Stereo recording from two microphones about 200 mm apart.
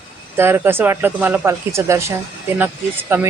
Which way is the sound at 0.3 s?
10° right (ahead or behind).